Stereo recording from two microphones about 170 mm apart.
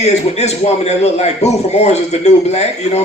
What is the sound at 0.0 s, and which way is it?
A man's voice, 40° left (ahead or behind).